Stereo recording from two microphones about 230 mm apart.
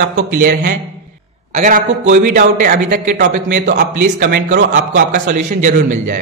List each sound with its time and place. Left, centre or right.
0.0 s a man's voice: right